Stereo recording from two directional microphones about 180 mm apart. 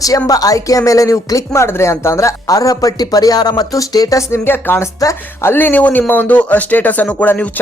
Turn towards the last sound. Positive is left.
turn(degrees=10)  # may be behind; listen again after turning